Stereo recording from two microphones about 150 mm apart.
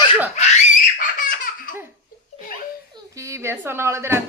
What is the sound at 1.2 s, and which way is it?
Laughter, 65° left (ahead or behind).